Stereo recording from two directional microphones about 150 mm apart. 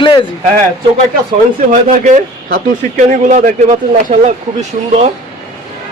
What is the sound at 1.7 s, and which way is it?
A man's voice, 60° right (ahead or behind).